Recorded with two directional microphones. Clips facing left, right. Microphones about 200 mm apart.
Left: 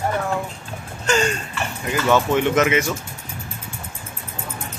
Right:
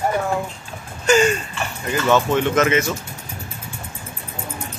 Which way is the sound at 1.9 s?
10° left (ahead or behind).